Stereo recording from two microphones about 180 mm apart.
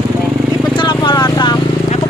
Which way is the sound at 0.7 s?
25° left (ahead or behind).